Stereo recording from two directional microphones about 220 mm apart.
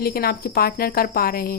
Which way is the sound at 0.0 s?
45° left (ahead or behind).